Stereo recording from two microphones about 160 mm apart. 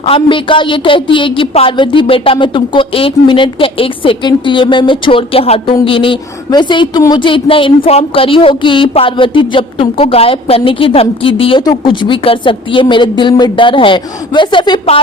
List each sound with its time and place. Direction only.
0.0 s a woman's voice: 35° left (ahead or behind)